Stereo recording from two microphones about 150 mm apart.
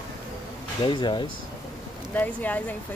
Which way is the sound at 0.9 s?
30° left (ahead or behind).